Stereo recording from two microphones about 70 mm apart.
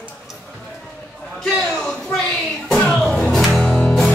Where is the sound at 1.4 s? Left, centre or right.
Centre.